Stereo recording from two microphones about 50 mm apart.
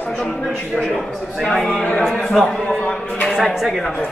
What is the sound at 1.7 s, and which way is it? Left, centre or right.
Speech, left.